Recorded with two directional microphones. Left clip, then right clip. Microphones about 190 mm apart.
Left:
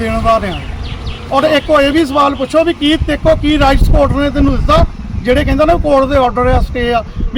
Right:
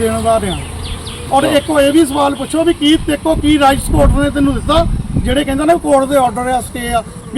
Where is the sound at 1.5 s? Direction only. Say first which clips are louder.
Left 1 dB; 10° left (ahead or behind).